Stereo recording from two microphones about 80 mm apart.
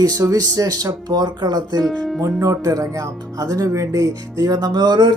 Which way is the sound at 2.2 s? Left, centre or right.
Right.